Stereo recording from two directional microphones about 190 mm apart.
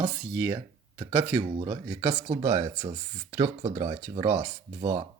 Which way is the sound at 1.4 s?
25° right (ahead or behind).